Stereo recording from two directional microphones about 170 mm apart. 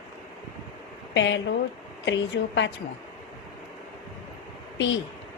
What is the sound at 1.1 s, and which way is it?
Speech, 90° left.